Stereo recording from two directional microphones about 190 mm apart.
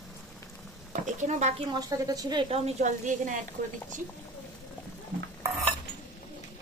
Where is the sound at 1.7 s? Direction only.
20° right (ahead or behind); by 3.3 s 40° right (ahead or behind).